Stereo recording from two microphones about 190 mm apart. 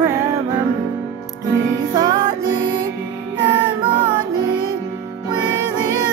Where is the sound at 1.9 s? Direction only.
20° right (ahead or behind).